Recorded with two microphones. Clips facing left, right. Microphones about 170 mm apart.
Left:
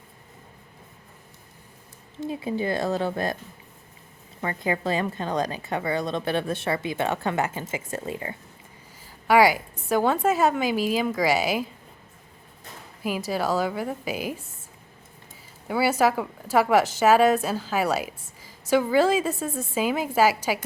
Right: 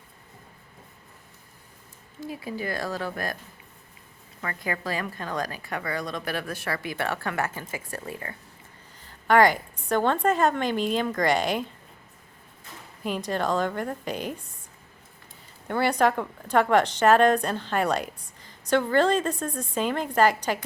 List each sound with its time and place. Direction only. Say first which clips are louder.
2.2 s a woman's voice: left 5 dB; 25° left (ahead or behind)
4.4 s a woman's voice: left 5 dB; 25° left (ahead or behind)
9.0 s a woman's voice: left 1 dB; 10° left (ahead or behind)
13.0 s a woman's voice: left 1 dB; 5° left (ahead or behind)
15.6 s a woman's voice: left 1 dB; 5° left (ahead or behind)